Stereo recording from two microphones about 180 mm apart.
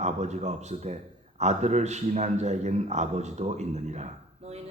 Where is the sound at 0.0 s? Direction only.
40° right (ahead or behind).